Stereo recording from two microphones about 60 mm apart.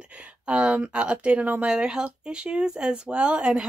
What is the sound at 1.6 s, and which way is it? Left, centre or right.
Speech, centre.